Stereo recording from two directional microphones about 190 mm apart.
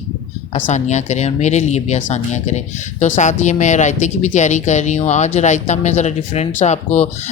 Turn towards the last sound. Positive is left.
turn(degrees=35)  # may be behind; listen again after turning